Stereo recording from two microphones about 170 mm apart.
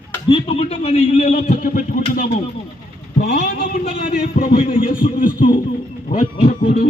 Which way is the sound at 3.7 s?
45° left (ahead or behind).